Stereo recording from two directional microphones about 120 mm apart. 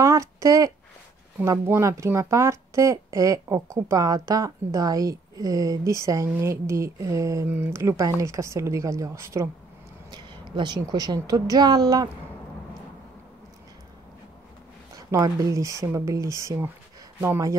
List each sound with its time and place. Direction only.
0.0 s a sound: 25° right (ahead or behind)
1.4 s a woman's voice: 25° right (ahead or behind)
7.4 s speech: 15° right (ahead or behind)
7.7 s a woman's voice: 25° right (ahead or behind)
10.1 s a woman's voice: 40° right (ahead or behind)
15.0 s a woman's voice: 25° right (ahead or behind)